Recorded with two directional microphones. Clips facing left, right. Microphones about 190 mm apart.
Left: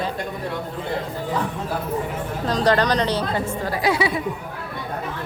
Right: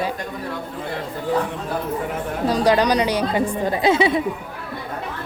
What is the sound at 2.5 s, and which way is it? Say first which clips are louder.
Speech: right 2 dB; 10° right (ahead or behind).